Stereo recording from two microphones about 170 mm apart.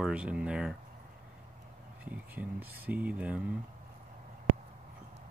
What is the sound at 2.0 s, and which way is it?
Speech, 10° right (ahead or behind).